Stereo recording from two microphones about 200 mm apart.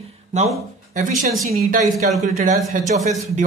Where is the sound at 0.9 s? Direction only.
40° right (ahead or behind).